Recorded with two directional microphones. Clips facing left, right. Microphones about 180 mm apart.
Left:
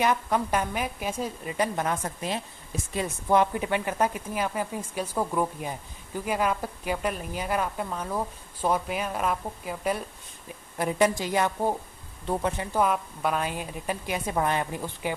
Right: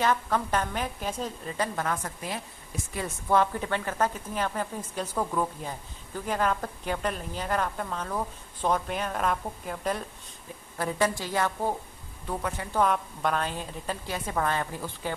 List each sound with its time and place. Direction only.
0.0 s speech: 15° left (ahead or behind)
10.8 s speech: 15° left (ahead or behind)
12.7 s speech: 5° left (ahead or behind)